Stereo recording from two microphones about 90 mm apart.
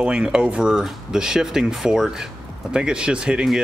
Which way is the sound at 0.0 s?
10° right (ahead or behind).